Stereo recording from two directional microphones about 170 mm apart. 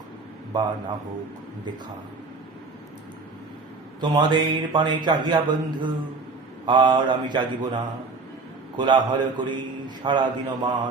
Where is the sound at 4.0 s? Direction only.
25° right (ahead or behind).